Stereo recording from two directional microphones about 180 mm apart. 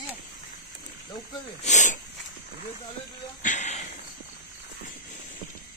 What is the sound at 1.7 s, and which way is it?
Speech, 40° left (ahead or behind).